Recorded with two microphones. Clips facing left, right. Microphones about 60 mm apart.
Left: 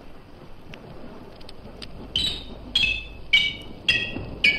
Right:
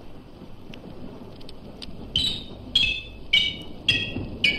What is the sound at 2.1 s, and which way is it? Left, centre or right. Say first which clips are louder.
Music: right 1 dB; left.